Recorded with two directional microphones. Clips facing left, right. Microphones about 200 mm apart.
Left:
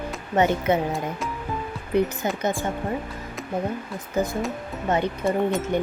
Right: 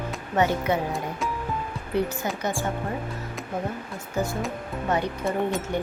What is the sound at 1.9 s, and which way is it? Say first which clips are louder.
Speech: left 4 dB; 15° left (ahead or behind).